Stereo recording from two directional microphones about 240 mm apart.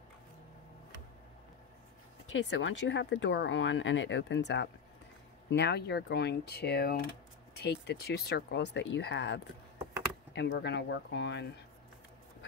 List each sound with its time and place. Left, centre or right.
2.3 s speech: left